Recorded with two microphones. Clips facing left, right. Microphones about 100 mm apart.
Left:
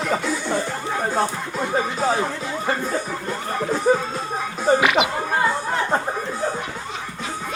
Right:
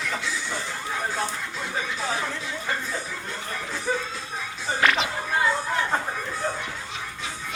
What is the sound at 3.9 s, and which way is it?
Speech, 45° left (ahead or behind).